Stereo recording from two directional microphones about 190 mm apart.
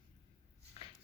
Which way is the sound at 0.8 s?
30° left (ahead or behind).